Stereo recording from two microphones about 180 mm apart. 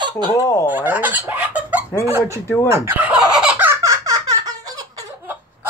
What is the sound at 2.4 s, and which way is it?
Speech, 15° left (ahead or behind).